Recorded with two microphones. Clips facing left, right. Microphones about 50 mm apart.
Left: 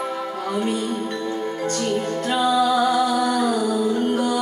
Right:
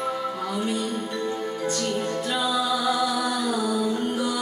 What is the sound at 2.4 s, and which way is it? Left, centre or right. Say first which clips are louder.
Music: left 7 dB; left.